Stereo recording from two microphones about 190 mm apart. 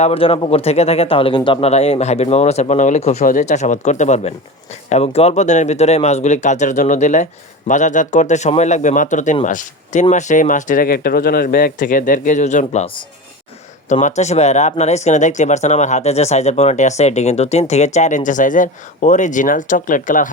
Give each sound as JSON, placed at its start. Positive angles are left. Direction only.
{"t": 0.0, "sound": "speech", "side_deg": 30}
{"t": 14.0, "sound": "speech", "side_deg": 35}